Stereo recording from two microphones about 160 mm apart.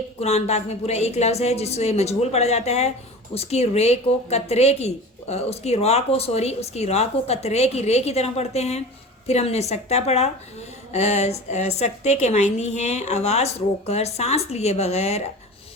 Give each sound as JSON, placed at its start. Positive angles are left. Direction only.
{"t": 0.2, "sound": "a woman's voice", "side_deg": 45}